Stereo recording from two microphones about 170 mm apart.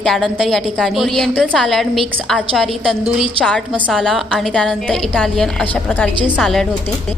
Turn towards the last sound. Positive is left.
turn(degrees=0)  # may be behind; listen again after turning